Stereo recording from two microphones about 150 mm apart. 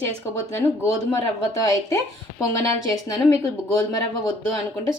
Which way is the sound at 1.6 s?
25° left (ahead or behind).